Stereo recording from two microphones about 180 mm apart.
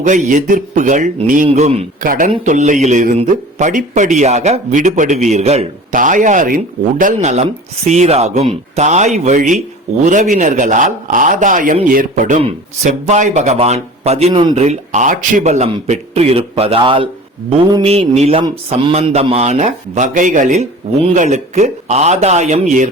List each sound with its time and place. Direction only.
0.0 s a man's voice: 45° right (ahead or behind)
1.5 s a man's voice: 35° right (ahead or behind)
2.0 s a man's voice: 50° right (ahead or behind)